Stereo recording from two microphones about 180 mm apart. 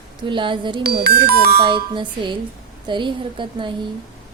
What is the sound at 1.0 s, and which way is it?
Speech, 60° right (ahead or behind).